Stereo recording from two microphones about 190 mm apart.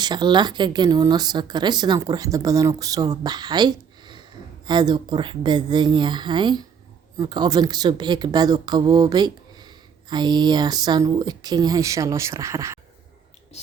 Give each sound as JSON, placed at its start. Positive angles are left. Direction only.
{"t": 0.0, "sound": "speech", "side_deg": -25}